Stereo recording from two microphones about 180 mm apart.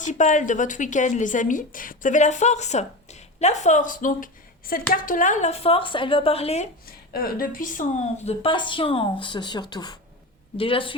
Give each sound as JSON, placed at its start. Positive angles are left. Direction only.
{"t": 0.0, "sound": "a woman's voice", "side_deg": 45}
{"t": 7.1, "sound": "a woman's voice", "side_deg": 55}